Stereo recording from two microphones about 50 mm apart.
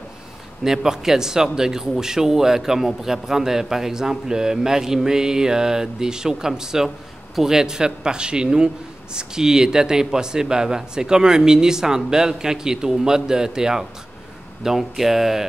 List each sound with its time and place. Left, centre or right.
0.7 s speech: centre